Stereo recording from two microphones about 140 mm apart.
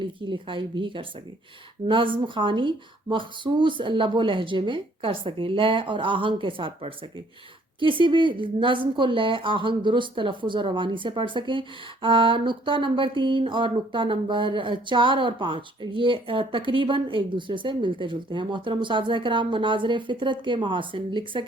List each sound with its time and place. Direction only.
0.0 s speech: 35° right (ahead or behind)